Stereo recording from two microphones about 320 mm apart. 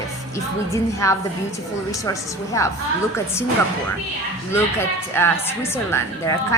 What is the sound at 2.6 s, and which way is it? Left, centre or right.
Speech, centre.